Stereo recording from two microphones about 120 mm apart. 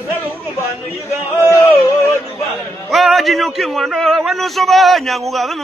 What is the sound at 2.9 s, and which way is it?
Speech, centre (ahead or behind).